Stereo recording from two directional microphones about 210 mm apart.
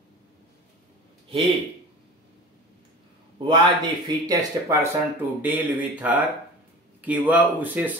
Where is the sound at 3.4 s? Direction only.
20° right (ahead or behind).